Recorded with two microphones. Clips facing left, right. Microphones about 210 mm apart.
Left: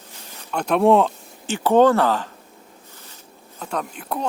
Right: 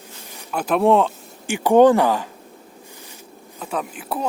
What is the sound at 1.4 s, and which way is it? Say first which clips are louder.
Speech: right 2 dB; 10° right (ahead or behind).